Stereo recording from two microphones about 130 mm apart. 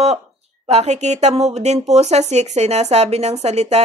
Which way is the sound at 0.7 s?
60° right (ahead or behind).